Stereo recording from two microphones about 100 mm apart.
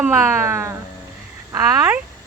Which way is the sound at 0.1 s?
25° right (ahead or behind).